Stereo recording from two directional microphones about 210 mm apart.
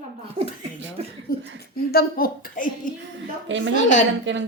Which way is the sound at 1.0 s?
30° right (ahead or behind).